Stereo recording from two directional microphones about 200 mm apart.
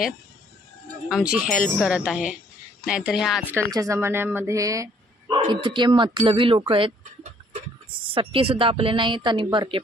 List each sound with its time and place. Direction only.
1.0 s speech: 5° right (ahead or behind); by 9.8 s 25° right (ahead or behind)